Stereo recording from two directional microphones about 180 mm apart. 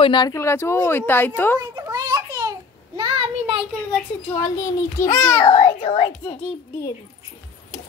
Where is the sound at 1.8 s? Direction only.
20° right (ahead or behind).